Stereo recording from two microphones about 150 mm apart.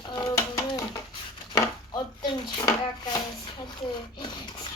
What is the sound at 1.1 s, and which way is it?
Chopping, 30° left (ahead or behind).